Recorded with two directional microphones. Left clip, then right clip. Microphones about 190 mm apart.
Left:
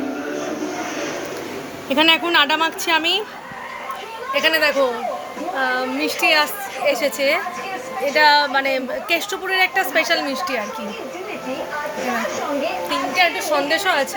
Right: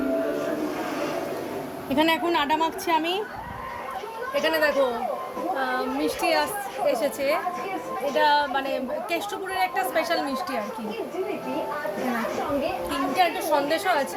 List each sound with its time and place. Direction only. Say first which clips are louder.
1.9 s a woman's voice: left 7 dB; 5° left (ahead or behind)
4.4 s a woman's voice: left 5 dB; 10° left (ahead or behind)
13.1 s a woman's voice: left 4 dB; 5° left (ahead or behind)